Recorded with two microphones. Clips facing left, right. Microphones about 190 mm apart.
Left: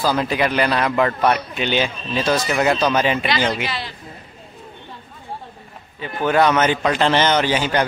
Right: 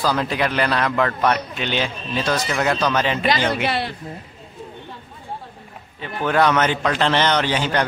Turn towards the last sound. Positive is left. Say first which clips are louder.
# left 2 dB
turn(degrees=5)  # may be behind; listen again after turning